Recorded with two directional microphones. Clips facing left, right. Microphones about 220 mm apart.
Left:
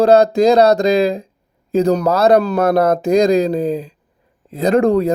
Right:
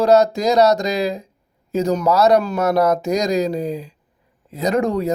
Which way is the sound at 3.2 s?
55° left (ahead or behind).